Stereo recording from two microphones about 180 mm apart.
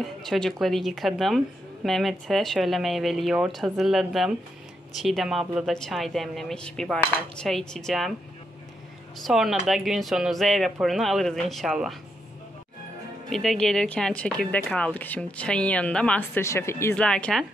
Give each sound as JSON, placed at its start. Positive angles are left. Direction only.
{"t": 0.0, "sound": "a woman's voice", "side_deg": 0}
{"t": 9.2, "sound": "a woman's voice", "side_deg": 0}
{"t": 13.3, "sound": "a woman's voice", "side_deg": 0}